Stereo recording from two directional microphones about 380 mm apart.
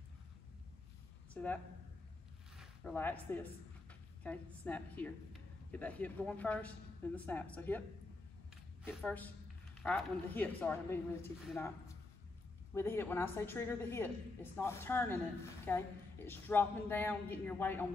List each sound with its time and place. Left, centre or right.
1.3 s speech: centre
2.5 s zipper: centre
4.2 s a woman's voice: centre
8.8 s a woman's voice: centre
12.7 s a woman's voice: centre